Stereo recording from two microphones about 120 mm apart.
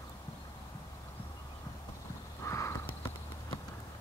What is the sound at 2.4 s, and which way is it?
Crow, 25° left (ahead or behind).